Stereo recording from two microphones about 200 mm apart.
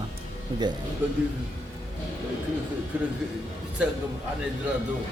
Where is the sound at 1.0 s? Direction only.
10° right (ahead or behind).